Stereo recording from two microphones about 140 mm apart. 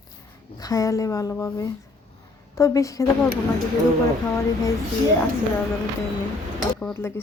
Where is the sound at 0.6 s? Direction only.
25° left (ahead or behind).